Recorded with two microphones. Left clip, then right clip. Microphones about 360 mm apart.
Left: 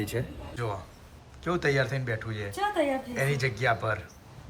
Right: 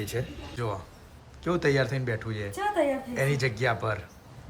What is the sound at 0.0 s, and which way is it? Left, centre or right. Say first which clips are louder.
A woman's voice: even; centre.